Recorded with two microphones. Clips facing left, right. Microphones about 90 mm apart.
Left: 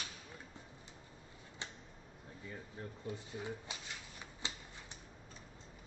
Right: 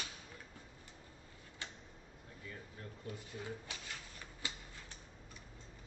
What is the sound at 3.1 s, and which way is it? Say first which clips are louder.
Speech: left 2 dB; 20° left (ahead or behind).